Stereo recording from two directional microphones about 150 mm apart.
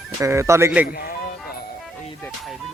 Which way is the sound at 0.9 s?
75° left (ahead or behind).